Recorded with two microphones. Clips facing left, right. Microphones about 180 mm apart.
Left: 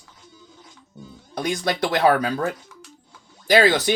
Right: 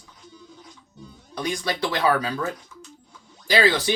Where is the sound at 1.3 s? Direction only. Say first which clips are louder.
Left 3 dB; 65° left (ahead or behind).